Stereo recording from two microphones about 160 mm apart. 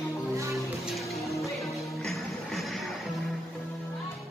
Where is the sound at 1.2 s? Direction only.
20° left (ahead or behind).